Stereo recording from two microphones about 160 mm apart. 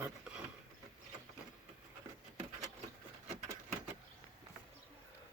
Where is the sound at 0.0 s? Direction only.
5° right (ahead or behind).